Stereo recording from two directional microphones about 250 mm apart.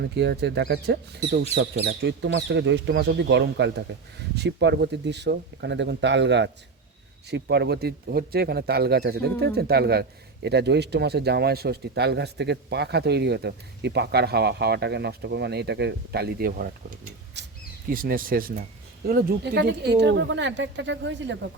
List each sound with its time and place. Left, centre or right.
0.0 s speech: right
17.4 s a sound: right
17.8 s speech: right